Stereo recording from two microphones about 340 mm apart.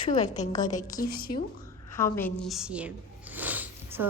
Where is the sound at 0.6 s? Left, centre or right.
Left.